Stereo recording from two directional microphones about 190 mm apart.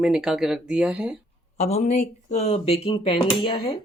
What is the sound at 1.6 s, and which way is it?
Speech, 35° left (ahead or behind).